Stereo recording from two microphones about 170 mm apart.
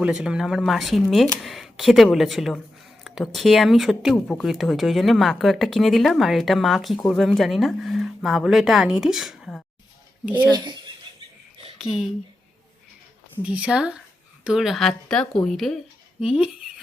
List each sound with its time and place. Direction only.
0.0 s speech: 5° right (ahead or behind)
10.5 s speech: 25° right (ahead or behind)
13.4 s speech: 5° right (ahead or behind)